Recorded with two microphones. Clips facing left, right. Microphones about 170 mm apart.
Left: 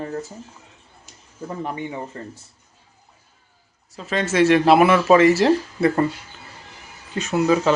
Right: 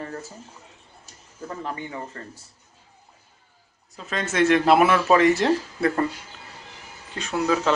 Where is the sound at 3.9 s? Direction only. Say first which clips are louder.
Left 5 dB; centre (ahead or behind).